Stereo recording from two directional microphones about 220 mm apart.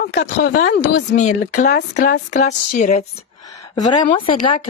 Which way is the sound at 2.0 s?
50° left (ahead or behind).